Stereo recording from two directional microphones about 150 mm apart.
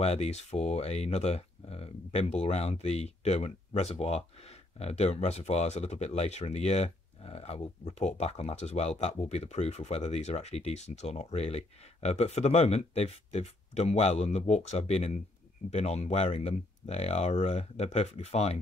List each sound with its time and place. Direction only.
0.0 s speech: 45° left (ahead or behind)